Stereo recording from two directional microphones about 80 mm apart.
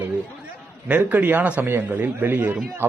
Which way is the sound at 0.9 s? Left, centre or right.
Centre.